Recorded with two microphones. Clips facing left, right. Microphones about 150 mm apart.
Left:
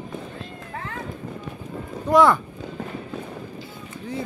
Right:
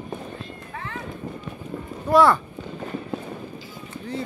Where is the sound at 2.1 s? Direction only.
15° left (ahead or behind).